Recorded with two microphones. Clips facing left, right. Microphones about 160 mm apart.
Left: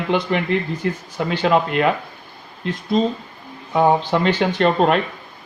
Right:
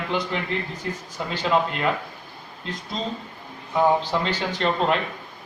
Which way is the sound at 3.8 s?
65° left (ahead or behind).